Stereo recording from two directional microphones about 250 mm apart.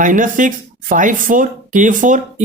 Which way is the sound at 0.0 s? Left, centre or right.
Right.